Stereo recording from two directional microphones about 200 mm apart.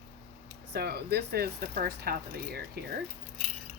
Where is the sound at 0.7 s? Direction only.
55° right (ahead or behind).